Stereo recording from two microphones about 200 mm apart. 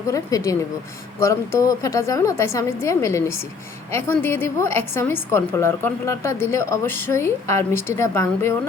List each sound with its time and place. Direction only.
0.1 s a woman's voice: 15° left (ahead or behind)